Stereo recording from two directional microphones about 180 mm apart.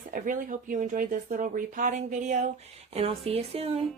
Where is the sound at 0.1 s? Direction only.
50° right (ahead or behind).